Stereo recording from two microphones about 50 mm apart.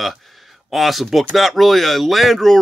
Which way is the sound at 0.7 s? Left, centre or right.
Centre.